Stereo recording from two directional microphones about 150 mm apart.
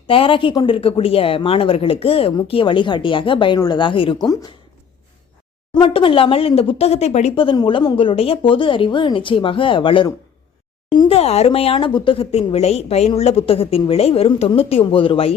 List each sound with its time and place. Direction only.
0.1 s speech: 35° left (ahead or behind)
5.7 s speech: 35° left (ahead or behind)
11.1 s speech: 45° left (ahead or behind)